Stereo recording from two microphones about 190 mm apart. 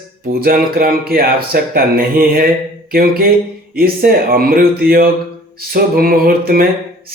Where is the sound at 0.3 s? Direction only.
50° right (ahead or behind).